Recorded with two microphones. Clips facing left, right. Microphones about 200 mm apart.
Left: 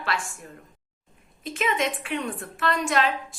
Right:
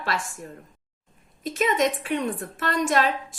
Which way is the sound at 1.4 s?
40° right (ahead or behind).